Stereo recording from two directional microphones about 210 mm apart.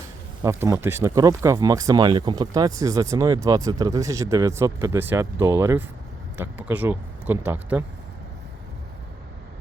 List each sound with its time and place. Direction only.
0.4 s speech: 10° right (ahead or behind)